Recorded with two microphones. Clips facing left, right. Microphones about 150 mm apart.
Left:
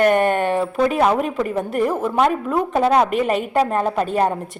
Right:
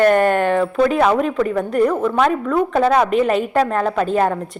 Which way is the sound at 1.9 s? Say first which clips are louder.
Right 1 dB; 25° left (ahead or behind).